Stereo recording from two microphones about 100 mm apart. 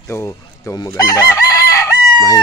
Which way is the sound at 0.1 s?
25° left (ahead or behind).